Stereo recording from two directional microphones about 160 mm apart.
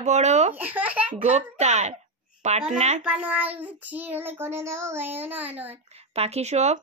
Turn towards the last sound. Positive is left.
turn(degrees=-45)  # may be behind; listen again after turning